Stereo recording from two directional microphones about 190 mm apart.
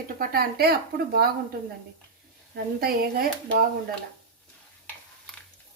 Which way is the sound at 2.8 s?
50° right (ahead or behind).